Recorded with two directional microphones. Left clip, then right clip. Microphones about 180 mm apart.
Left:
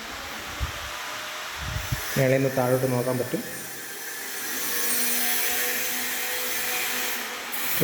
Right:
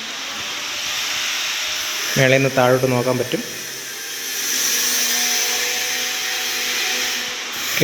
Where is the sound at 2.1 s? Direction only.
Centre (ahead or behind).